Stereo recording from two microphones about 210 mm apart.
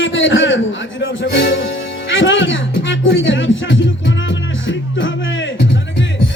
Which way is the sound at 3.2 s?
65° left (ahead or behind).